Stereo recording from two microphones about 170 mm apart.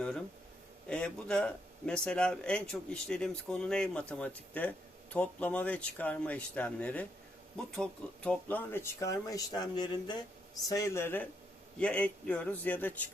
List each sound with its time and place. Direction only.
0.9 s speech: 5° left (ahead or behind)